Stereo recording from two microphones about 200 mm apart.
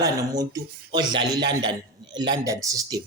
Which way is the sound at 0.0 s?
15° right (ahead or behind).